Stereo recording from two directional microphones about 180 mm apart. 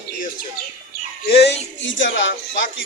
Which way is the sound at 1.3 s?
65° left (ahead or behind).